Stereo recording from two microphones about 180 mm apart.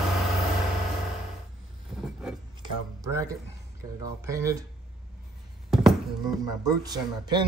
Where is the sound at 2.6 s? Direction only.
20° right (ahead or behind).